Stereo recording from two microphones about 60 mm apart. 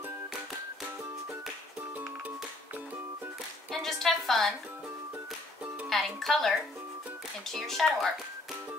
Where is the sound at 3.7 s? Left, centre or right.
Centre.